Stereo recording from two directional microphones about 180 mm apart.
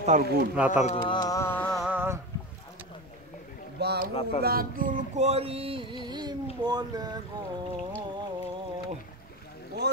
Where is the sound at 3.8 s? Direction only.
65° right (ahead or behind).